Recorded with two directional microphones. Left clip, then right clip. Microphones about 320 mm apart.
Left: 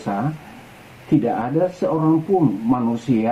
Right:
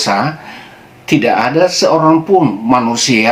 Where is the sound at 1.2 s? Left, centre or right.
Centre.